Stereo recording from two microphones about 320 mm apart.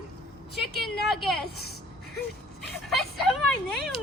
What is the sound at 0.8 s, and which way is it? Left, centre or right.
Speech, centre.